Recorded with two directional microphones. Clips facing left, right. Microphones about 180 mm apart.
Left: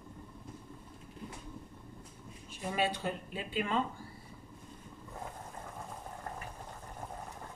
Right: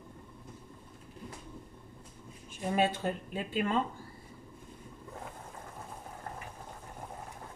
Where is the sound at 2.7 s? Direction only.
50° right (ahead or behind).